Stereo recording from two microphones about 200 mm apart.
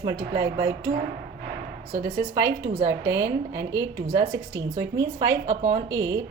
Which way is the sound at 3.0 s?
65° right (ahead or behind).